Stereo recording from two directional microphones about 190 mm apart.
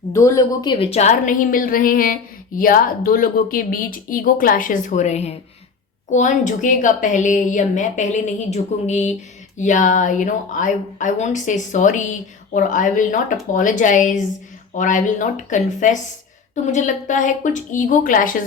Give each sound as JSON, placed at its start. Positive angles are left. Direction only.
{"t": 0.1, "sound": "a woman's voice", "side_deg": 15}